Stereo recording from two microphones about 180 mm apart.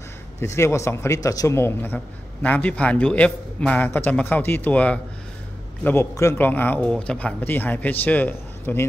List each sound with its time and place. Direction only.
0.4 s speech: 15° left (ahead or behind)